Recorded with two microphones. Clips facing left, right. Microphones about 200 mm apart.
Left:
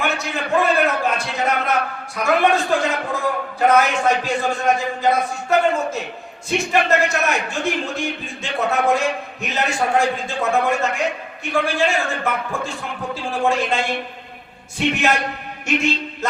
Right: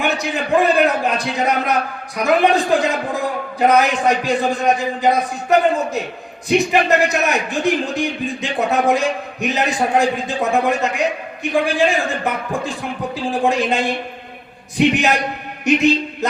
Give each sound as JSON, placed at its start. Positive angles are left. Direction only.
{"t": 0.3, "sound": "a man's voice", "side_deg": -15}
{"t": 16.2, "sound": "a man's voice", "side_deg": -15}